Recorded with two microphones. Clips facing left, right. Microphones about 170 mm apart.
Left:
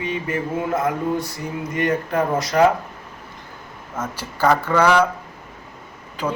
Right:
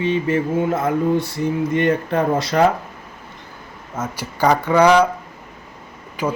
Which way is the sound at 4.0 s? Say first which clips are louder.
Right 2 dB; 15° right (ahead or behind).